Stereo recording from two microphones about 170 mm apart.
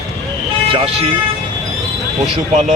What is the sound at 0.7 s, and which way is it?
Speech, 35° right (ahead or behind).